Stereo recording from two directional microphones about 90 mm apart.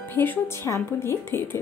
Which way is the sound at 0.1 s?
25° left (ahead or behind).